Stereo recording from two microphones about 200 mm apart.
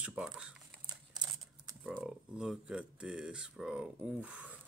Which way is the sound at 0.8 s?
20° right (ahead or behind).